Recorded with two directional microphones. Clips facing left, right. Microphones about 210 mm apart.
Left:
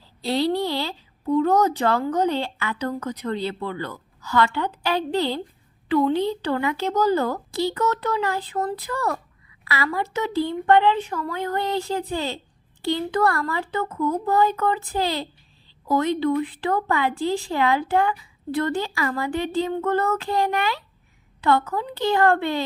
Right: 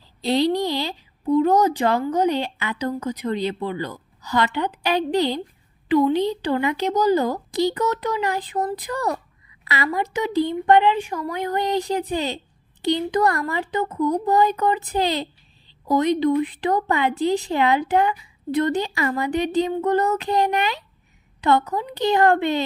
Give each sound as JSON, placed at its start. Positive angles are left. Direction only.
{"t": 0.2, "sound": "speech", "side_deg": -20}